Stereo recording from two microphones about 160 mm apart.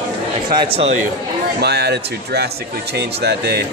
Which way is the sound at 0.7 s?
40° right (ahead or behind).